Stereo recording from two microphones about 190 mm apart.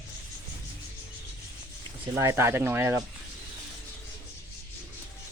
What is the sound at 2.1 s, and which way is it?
Speech, 15° right (ahead or behind).